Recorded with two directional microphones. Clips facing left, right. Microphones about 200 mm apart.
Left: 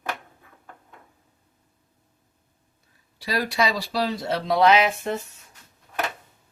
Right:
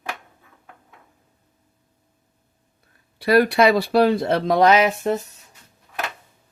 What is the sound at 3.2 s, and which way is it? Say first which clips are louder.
Speech: right 9 dB; 60° right (ahead or behind).